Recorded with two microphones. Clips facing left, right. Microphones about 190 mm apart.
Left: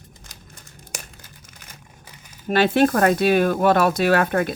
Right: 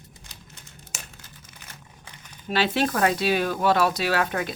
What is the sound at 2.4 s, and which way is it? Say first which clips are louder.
Speech: left 7 dB; 50° left (ahead or behind).